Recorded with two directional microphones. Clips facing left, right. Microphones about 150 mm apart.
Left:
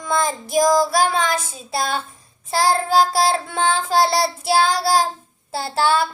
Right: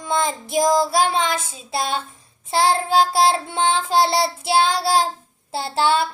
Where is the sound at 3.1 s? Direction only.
25° right (ahead or behind).